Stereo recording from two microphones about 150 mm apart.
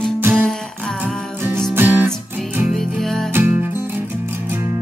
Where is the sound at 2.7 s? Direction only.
Centre (ahead or behind).